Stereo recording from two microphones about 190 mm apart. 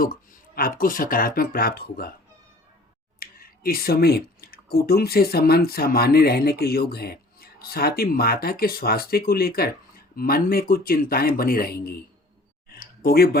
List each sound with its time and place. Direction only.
0.0 s speech: 50° left (ahead or behind)
3.2 s speech: 50° left (ahead or behind)
12.6 s a sound: 50° left (ahead or behind)